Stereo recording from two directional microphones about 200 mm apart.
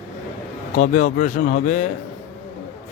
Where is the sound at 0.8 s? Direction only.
40° left (ahead or behind).